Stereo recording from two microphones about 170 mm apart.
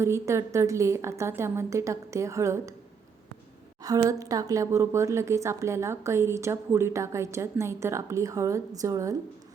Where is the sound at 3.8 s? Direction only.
20° right (ahead or behind).